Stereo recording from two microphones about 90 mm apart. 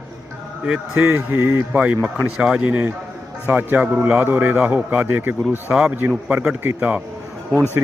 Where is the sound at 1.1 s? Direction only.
25° right (ahead or behind).